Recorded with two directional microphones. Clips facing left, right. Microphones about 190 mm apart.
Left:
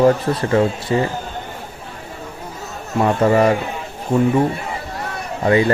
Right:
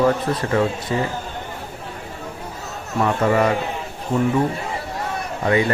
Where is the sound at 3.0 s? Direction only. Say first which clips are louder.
Left 4 dB; 30° left (ahead or behind).